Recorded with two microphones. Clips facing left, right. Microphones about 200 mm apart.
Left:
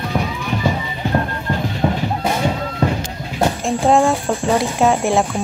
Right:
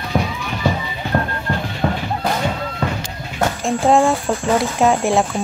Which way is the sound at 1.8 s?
15° left (ahead or behind).